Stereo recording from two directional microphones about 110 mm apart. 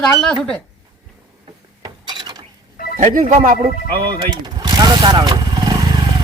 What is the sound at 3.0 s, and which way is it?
Speech, 75° right (ahead or behind).